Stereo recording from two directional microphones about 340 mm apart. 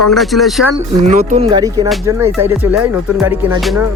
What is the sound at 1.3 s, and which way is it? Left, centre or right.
Music, centre.